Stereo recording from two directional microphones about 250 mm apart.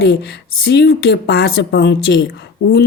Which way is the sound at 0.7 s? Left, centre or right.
Left.